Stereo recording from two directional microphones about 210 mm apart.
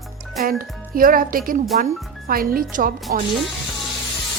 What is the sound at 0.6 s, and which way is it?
Speech, 45° right (ahead or behind).